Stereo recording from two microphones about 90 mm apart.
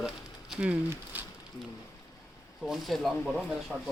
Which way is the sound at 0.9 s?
20° right (ahead or behind).